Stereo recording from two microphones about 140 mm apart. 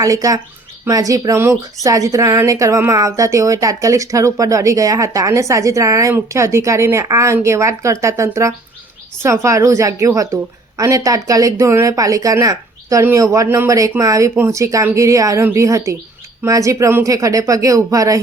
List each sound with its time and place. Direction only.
0.0 s speech: 25° right (ahead or behind)